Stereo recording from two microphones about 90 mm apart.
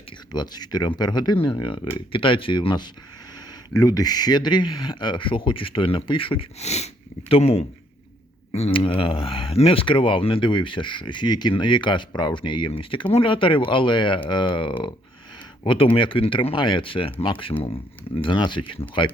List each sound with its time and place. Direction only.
0.3 s speech: 50° left (ahead or behind)
1.4 s speech: 65° left (ahead or behind)
7.3 s speech: 90° left
8.7 s speech: 90° left; by 14.9 s 70° left (ahead or behind)
15.6 s speech: 80° left
18.2 s speech: 60° left (ahead or behind)